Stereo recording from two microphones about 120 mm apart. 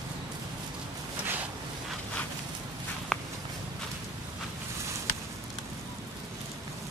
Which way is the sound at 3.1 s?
5° left (ahead or behind).